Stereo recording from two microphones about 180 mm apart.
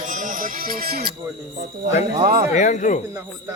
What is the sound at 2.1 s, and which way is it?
Music, 50° right (ahead or behind).